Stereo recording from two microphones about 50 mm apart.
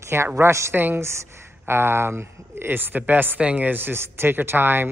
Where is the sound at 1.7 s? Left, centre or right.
Right.